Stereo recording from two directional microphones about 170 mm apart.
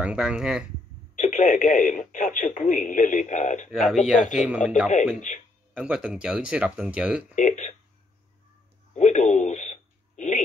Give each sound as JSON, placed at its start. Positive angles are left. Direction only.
{"t": 0.0, "sound": "speech", "side_deg": -5}
{"t": 1.1, "sound": "speech", "side_deg": 45}
{"t": 3.7, "sound": "speech", "side_deg": 0}
{"t": 4.9, "sound": "speech", "side_deg": 45}
{"t": 5.8, "sound": "speech", "side_deg": -5}
{"t": 7.3, "sound": "speech", "side_deg": 45}
{"t": 8.9, "sound": "telephone", "side_deg": 45}